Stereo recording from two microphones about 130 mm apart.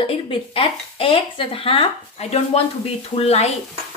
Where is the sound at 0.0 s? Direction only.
45° left (ahead or behind).